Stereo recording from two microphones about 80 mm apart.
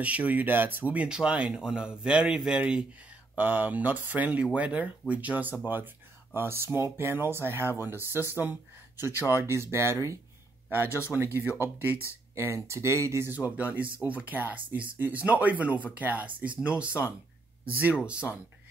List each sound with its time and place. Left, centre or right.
0.0 s speech: centre; by 10.1 s right
11.1 s speech: centre
12.4 s speech: right
13.6 s speech: centre